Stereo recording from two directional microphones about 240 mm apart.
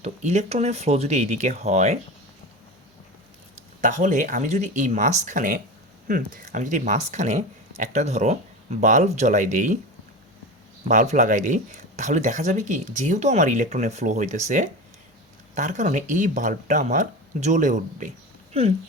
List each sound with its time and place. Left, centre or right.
0.0 s speech: right
3.5 s speech: right
10.8 s speech: right